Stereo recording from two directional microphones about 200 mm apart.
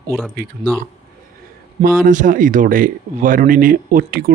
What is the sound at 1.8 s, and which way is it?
Speech, 40° right (ahead or behind).